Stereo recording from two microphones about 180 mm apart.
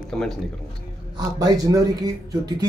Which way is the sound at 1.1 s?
20° right (ahead or behind).